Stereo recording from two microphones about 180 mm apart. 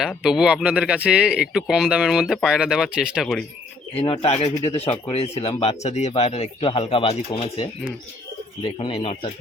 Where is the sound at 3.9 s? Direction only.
30° left (ahead or behind).